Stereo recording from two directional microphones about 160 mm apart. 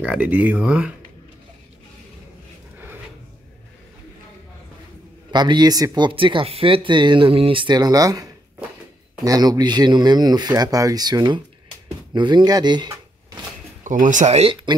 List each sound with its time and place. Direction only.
0.0 s speech: 10° right (ahead or behind)
5.3 s speech: 25° right (ahead or behind)
13.8 s speech: 55° right (ahead or behind); by 14.8 s 30° right (ahead or behind)